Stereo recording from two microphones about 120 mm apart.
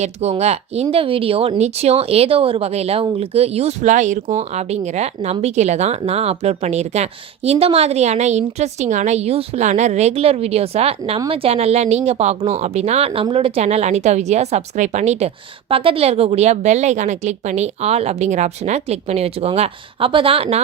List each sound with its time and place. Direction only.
0.0 s speech: 65° right (ahead or behind)
6.0 s speech: 60° right (ahead or behind)
13.6 s a woman's voice: 65° right (ahead or behind)
15.7 s speech: 50° right (ahead or behind)